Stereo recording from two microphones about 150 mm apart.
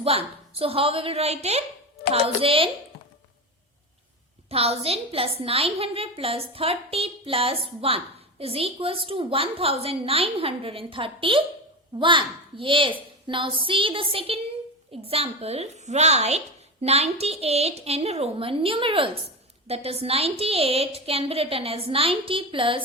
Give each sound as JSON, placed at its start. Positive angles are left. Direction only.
{"t": 0.0, "sound": "a woman's voice", "side_deg": -40}
{"t": 4.4, "sound": "a woman's voice", "side_deg": -40}